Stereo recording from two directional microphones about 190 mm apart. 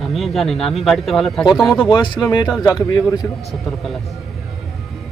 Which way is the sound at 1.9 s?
25° left (ahead or behind).